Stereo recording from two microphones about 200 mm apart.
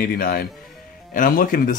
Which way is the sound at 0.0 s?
50° left (ahead or behind).